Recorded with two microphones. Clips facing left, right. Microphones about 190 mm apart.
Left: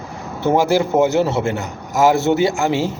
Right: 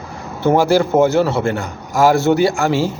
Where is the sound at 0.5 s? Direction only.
20° left (ahead or behind).